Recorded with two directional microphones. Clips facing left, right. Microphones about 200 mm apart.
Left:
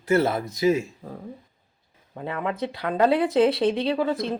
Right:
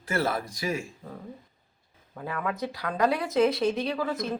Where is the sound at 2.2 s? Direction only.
25° left (ahead or behind).